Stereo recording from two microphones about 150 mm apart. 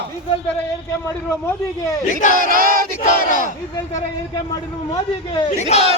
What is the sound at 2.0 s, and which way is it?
Battle cry, 60° left (ahead or behind).